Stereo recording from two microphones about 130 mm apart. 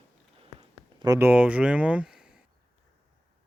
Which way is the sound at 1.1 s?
15° right (ahead or behind).